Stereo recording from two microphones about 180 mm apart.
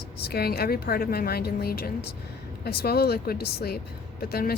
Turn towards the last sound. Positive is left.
turn(degrees=60)  # may be behind; listen again after turning